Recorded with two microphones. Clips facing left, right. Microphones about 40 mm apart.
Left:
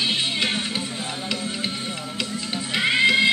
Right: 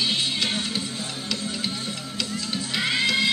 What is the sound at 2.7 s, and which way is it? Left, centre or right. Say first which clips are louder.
Music: left 5 dB; centre.